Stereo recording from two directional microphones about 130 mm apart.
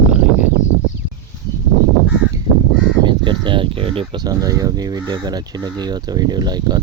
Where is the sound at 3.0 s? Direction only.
35° right (ahead or behind).